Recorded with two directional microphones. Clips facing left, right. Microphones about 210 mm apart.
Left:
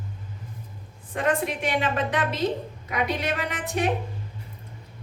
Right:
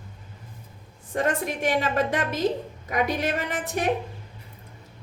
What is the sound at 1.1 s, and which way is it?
Speech, 45° right (ahead or behind).